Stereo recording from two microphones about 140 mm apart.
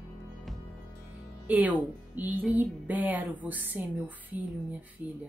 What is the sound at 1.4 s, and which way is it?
A woman's voice, 10° right (ahead or behind).